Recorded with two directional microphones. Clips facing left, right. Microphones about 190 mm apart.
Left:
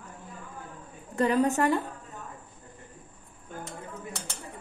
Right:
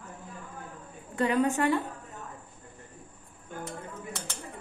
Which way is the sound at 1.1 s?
40° left (ahead or behind).